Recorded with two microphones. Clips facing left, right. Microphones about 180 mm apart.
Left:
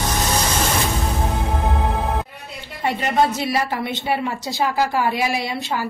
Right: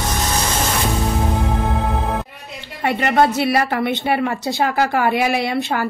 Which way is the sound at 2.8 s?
65° right (ahead or behind).